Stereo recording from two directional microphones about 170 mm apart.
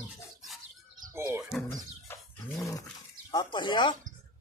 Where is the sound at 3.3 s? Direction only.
25° left (ahead or behind).